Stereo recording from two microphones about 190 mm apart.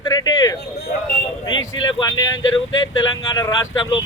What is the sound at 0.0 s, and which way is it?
Speech, 20° left (ahead or behind).